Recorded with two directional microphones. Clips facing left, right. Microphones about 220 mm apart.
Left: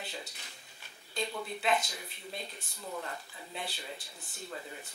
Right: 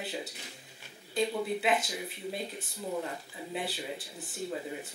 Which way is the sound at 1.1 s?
5° right (ahead or behind).